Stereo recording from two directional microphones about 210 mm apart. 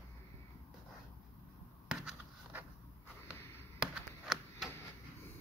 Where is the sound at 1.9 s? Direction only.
Centre (ahead or behind).